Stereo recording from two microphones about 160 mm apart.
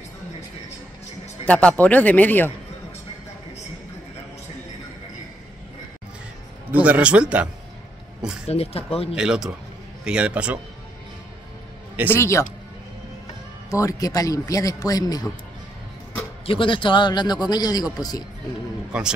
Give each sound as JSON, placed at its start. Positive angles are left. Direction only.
{"t": 1.4, "sound": "speech", "side_deg": 10}
{"t": 6.7, "sound": "speech", "side_deg": -10}
{"t": 8.5, "sound": "speech", "side_deg": 40}
{"t": 9.1, "sound": "speech", "side_deg": -5}
{"t": 12.1, "sound": "speech", "side_deg": 15}
{"t": 13.7, "sound": "a man's voice", "side_deg": 20}
{"t": 16.4, "sound": "a man's voice", "side_deg": 30}
{"t": 18.9, "sound": "a man's voice", "side_deg": -5}